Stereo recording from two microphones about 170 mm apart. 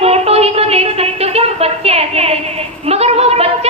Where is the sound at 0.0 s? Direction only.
35° right (ahead or behind).